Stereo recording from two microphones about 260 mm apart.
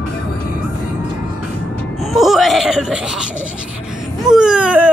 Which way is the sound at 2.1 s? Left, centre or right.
Centre.